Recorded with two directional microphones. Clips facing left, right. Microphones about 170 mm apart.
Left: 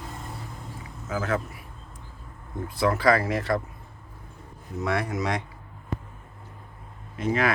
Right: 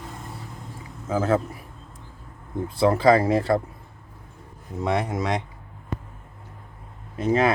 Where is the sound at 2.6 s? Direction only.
30° right (ahead or behind).